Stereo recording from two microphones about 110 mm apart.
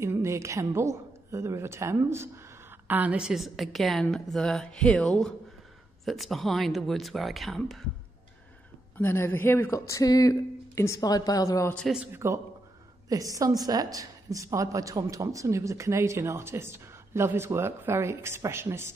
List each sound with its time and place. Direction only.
0.0 s a woman's voice: 25° right (ahead or behind)
2.9 s a woman's voice: 15° right (ahead or behind)
8.9 s speech: 20° left (ahead or behind)
12.1 s a woman's voice: 25° right (ahead or behind)